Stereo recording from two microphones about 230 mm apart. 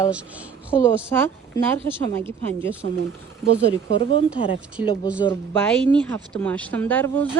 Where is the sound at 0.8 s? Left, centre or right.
Centre.